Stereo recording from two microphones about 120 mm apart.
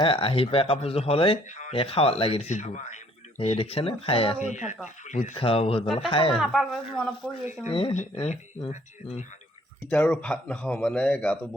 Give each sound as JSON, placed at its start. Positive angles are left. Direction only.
{"t": 0.0, "sound": "speech", "side_deg": 50}
{"t": 4.4, "sound": "speech", "side_deg": 85}
{"t": 5.4, "sound": "speech", "side_deg": 55}
{"t": 6.3, "sound": "speech", "side_deg": 0}
{"t": 7.7, "sound": "speech", "side_deg": 45}
{"t": 7.9, "sound": "speech", "side_deg": 70}
{"t": 9.9, "sound": "speech", "side_deg": 10}